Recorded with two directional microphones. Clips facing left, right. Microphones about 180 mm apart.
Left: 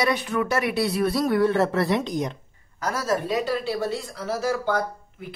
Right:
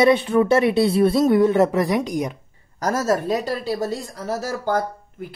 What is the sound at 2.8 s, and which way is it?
Speech, 45° right (ahead or behind).